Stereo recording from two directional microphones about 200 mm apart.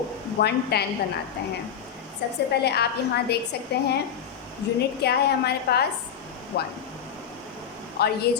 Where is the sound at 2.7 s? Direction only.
55° left (ahead or behind).